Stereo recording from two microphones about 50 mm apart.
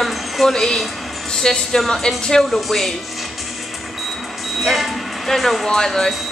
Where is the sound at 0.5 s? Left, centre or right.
Centre.